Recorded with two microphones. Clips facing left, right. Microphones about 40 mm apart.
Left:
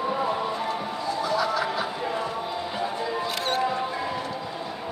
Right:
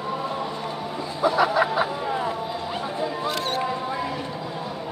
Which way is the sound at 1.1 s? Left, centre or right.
Right.